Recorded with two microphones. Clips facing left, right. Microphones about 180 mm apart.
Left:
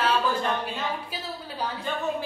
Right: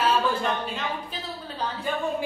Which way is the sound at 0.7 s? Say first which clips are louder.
Even; 10° left (ahead or behind).